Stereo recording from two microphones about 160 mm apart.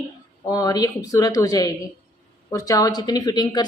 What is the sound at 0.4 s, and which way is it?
A woman's voice, 25° left (ahead or behind).